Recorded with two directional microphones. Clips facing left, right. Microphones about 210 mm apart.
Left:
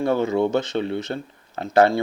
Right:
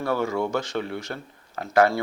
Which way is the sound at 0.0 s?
20° left (ahead or behind).